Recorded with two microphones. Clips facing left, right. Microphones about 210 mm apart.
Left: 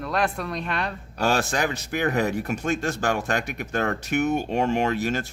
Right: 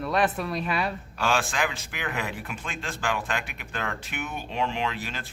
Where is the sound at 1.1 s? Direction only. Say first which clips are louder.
Left 5 dB; 40° left (ahead or behind).